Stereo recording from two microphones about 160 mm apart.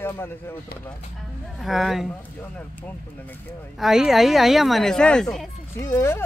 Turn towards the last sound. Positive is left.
turn(degrees=15)  # may be behind; listen again after turning